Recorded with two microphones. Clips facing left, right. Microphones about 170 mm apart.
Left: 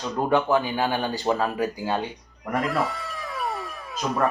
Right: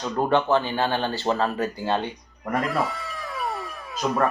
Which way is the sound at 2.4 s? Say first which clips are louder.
Even; centre (ahead or behind).